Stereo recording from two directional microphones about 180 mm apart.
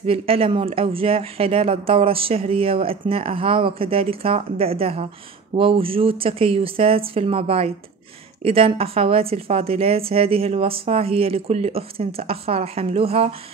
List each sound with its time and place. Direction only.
0.0 s a woman's voice: 30° right (ahead or behind)